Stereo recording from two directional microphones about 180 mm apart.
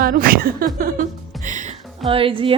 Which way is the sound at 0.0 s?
55° right (ahead or behind).